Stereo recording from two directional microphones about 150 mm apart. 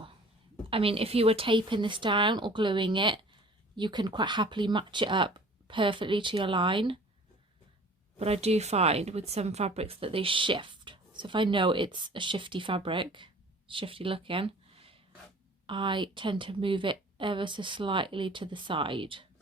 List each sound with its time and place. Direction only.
0.7 s a woman's voice: 40° right (ahead or behind)
8.2 s a woman's voice: 45° right (ahead or behind)